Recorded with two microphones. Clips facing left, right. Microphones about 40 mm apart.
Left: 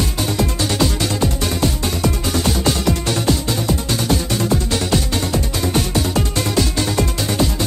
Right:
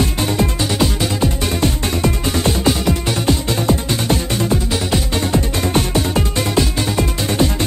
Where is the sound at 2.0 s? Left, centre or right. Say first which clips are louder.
Right 2 dB; centre.